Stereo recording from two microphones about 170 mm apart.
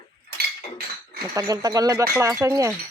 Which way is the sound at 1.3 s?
20° right (ahead or behind).